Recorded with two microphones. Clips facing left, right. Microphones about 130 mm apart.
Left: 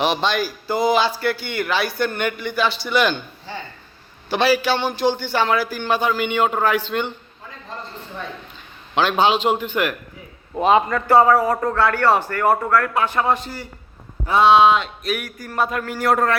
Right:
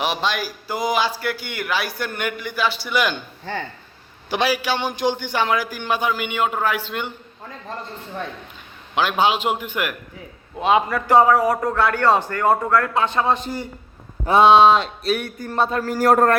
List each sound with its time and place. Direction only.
0.0 s a man's voice: 5° right (ahead or behind)
4.3 s a man's voice: 15° right (ahead or behind)
9.0 s a man's voice: 10° right (ahead or behind)
10.6 s a man's voice: centre (ahead or behind); by 13.7 s 20° right (ahead or behind)
14.3 s a sound: 25° right (ahead or behind); by 16.4 s 45° right (ahead or behind)